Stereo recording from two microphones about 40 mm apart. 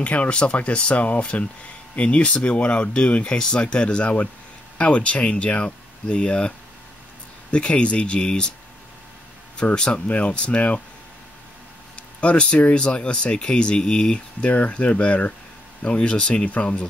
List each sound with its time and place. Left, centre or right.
0.0 s speech: left
3.3 s speech: centre
7.5 s speech: left
9.8 s speech: left
10.0 s speech: left
12.2 s speech: left
14.5 s speech: left